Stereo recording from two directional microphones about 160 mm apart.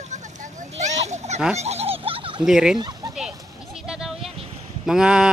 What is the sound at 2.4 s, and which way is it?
Speech, 5° right (ahead or behind).